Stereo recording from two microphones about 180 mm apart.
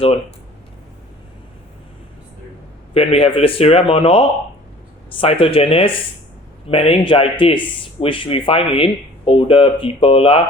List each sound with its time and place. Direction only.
2.9 s speech: 35° left (ahead or behind)